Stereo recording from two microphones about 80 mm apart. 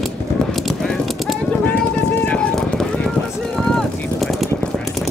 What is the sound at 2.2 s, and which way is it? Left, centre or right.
Run, centre.